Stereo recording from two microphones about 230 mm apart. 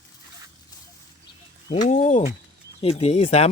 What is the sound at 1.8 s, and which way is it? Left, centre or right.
Speech, left.